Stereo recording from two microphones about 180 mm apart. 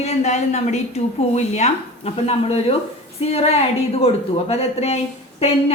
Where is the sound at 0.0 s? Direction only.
40° left (ahead or behind).